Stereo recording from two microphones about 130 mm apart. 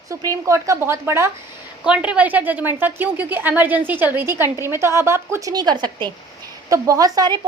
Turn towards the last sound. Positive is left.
turn(degrees=-30)  # may be behind; listen again after turning